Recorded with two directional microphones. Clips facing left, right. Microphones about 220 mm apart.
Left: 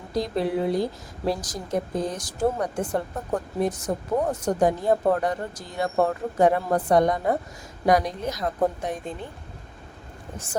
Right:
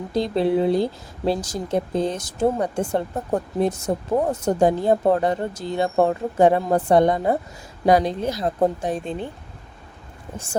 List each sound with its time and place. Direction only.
0.1 s a woman's voice: 25° right (ahead or behind)
10.3 s a woman's voice: 30° right (ahead or behind)